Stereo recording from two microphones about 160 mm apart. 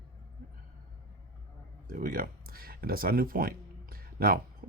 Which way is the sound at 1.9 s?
60° right (ahead or behind).